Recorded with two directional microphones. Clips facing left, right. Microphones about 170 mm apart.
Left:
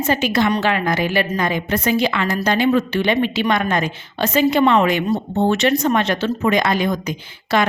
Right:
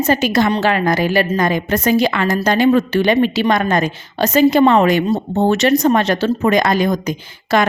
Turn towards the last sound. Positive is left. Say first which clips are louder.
# right 3 dB
turn(degrees=-45)  # may be behind; listen again after turning